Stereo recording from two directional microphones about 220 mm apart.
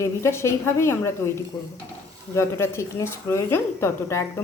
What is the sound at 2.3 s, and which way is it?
A woman's voice, 10° left (ahead or behind).